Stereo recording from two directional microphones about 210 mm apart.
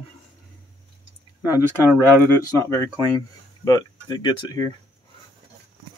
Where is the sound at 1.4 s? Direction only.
10° right (ahead or behind).